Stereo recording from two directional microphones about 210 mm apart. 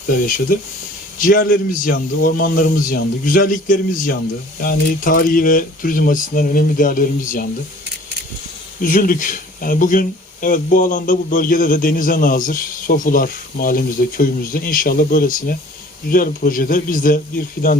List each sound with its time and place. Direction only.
1.3 s speech: 40° left (ahead or behind)
8.8 s speech: 40° left (ahead or behind)